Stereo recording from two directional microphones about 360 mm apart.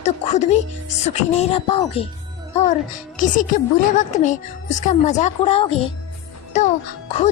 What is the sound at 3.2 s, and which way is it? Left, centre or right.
A woman's voice, left.